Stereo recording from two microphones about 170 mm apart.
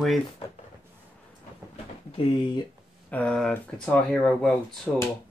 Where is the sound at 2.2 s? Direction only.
30° left (ahead or behind).